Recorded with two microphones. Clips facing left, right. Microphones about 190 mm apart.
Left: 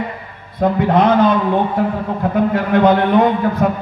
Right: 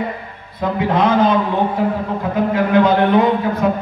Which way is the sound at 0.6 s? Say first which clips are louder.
Left 4 dB; 50° left (ahead or behind).